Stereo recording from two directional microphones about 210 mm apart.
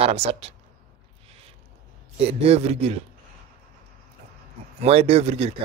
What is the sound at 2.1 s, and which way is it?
Speech, 30° right (ahead or behind).